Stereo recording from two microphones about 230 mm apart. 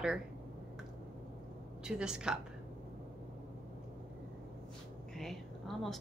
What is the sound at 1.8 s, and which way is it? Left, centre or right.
Speech, centre.